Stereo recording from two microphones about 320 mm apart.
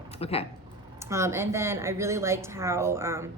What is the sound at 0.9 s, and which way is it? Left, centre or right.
A woman's voice, centre.